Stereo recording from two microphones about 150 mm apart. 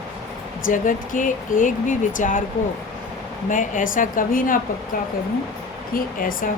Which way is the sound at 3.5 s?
60° left (ahead or behind).